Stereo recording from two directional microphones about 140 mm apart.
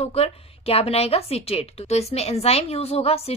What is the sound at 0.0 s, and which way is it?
A woman's voice, 50° left (ahead or behind).